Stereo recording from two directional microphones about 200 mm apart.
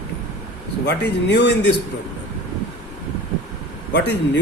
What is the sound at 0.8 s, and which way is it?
Speech, 55° left (ahead or behind).